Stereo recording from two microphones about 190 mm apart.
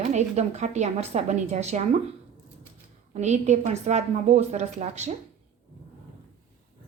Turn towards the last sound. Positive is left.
turn(degrees=-35)  # may be behind; listen again after turning